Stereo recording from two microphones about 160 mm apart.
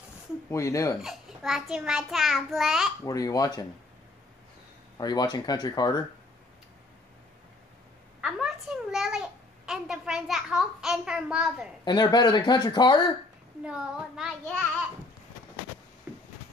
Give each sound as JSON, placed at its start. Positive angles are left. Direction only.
{"t": 0.5, "sound": "speech", "side_deg": 20}
{"t": 1.0, "sound": "a child's voice", "side_deg": 0}
{"t": 3.1, "sound": "speech", "side_deg": 20}
{"t": 4.9, "sound": "speech", "side_deg": 25}
{"t": 8.2, "sound": "a child's voice", "side_deg": -5}
{"t": 11.8, "sound": "speech", "side_deg": 25}
{"t": 13.7, "sound": "a child's voice", "side_deg": -5}